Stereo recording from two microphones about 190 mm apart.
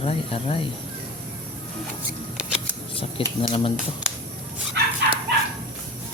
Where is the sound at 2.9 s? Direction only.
25° left (ahead or behind).